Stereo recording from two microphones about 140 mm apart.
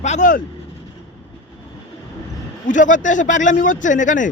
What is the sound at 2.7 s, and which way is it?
Speech, 65° left (ahead or behind).